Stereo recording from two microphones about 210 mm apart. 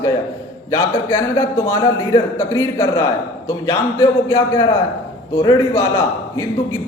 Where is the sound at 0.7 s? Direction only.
15° left (ahead or behind).